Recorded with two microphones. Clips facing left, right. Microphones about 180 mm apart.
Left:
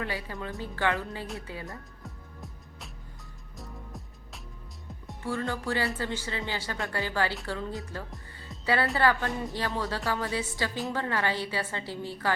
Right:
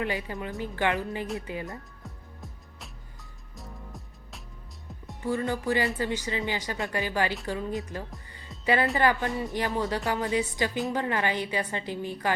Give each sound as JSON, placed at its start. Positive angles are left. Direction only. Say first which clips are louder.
{"t": 0.0, "sound": "speech", "louder": "right 3 dB", "side_deg": -20}
{"t": 2.0, "sound": "music", "louder": "even", "side_deg": 0}
{"t": 5.2, "sound": "speech", "louder": "right 3 dB", "side_deg": -15}
{"t": 8.3, "sound": "music", "louder": "right 2 dB", "side_deg": -20}
{"t": 9.0, "sound": "speech", "louder": "right 1 dB", "side_deg": -15}